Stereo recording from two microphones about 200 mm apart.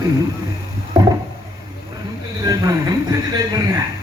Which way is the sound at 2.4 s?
20° right (ahead or behind).